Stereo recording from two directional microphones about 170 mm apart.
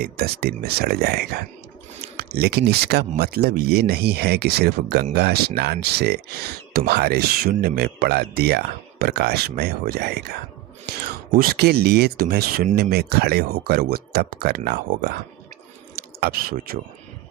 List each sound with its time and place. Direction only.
0.0 s speech: 65° right (ahead or behind)